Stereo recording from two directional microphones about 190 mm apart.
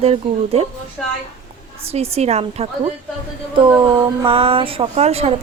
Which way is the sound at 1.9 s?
35° right (ahead or behind).